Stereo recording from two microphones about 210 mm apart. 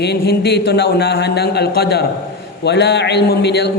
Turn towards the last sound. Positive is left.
turn(degrees=50)  # may be behind; listen again after turning